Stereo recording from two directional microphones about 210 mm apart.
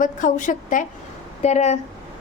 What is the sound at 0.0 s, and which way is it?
A woman's voice, 40° left (ahead or behind).